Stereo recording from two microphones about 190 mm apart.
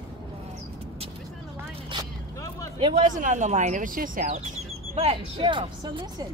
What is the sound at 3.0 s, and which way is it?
Speech, 40° right (ahead or behind).